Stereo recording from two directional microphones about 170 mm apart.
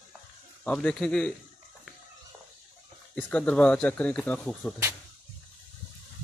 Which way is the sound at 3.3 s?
10° left (ahead or behind).